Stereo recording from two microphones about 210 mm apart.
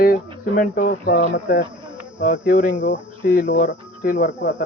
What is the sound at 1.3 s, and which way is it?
Speech, 60° left (ahead or behind).